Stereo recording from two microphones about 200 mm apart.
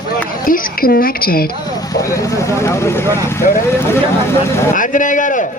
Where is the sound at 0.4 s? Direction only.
45° left (ahead or behind).